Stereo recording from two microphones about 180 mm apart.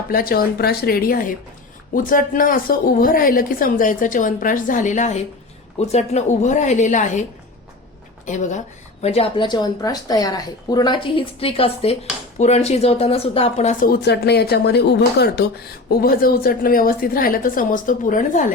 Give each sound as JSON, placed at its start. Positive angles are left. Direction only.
{"t": 0.1, "sound": "speech", "side_deg": 55}
{"t": 8.3, "sound": "speech", "side_deg": 45}